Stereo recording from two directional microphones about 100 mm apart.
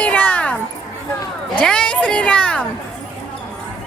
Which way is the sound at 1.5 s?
10° left (ahead or behind).